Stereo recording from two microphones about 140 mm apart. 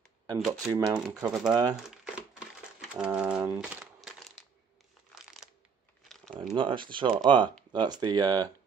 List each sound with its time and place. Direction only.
0.4 s speech: centre (ahead or behind)
0.7 s speech: 25° right (ahead or behind)
0.9 s speech: centre (ahead or behind)
1.5 s speech: 30° right (ahead or behind)
1.8 s crumpling: 5° right (ahead or behind)
2.9 s speech: 10° right (ahead or behind)
5.1 s crushing: 5° right (ahead or behind)
6.5 s speech: 35° right (ahead or behind)